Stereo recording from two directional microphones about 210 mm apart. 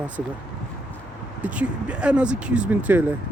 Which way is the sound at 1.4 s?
5° right (ahead or behind).